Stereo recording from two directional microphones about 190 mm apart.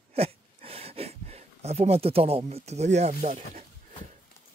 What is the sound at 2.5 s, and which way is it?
Speech, 35° right (ahead or behind).